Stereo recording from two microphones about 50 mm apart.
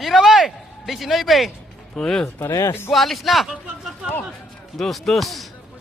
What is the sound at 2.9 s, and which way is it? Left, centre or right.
Speech, centre.